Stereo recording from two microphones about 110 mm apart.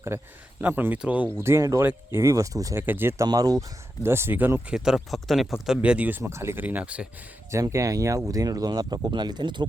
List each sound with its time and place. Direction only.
0.1 s speech: 25° right (ahead or behind)
2.8 s speech: 20° right (ahead or behind)
3.2 s speech: 35° right (ahead or behind)
4.0 s speech: 25° right (ahead or behind)
4.7 s speech: 5° right (ahead or behind)
7.5 s speech: 30° right (ahead or behind); by 9.6 s 45° right (ahead or behind)